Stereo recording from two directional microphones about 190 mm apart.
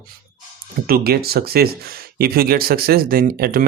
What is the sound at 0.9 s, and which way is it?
Speech, 55° right (ahead or behind).